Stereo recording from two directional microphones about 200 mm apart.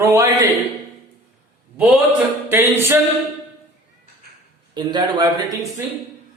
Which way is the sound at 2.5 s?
10° right (ahead or behind).